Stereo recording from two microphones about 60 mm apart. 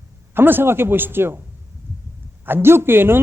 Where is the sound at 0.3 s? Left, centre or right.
Right.